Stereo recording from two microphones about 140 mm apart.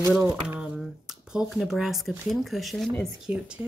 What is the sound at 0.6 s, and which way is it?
Speech, 5° right (ahead or behind).